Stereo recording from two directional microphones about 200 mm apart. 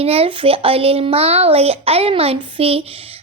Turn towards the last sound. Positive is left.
turn(degrees=-30)  # may be behind; listen again after turning